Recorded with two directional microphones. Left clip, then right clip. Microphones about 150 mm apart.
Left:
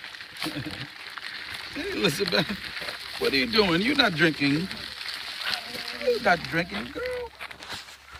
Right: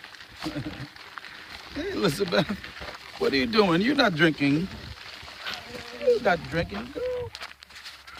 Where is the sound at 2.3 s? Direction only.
65° right (ahead or behind).